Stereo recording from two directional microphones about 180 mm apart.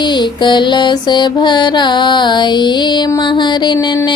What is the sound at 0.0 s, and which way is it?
Mantra, 25° left (ahead or behind).